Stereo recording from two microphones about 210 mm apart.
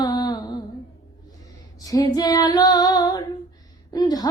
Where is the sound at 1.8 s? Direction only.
15° left (ahead or behind).